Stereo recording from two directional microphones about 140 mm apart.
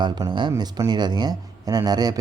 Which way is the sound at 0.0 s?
30° right (ahead or behind).